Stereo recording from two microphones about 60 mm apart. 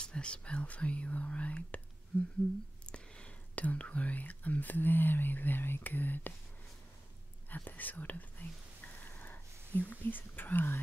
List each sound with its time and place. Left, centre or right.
0.0 s speech: centre
2.9 s speech: centre
7.4 s speech: left
9.0 s whispering: left